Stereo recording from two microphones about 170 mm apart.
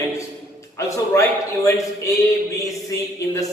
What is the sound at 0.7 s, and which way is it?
A man's voice, 20° left (ahead or behind).